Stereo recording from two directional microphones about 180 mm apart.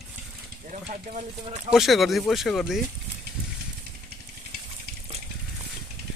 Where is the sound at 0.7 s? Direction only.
40° right (ahead or behind).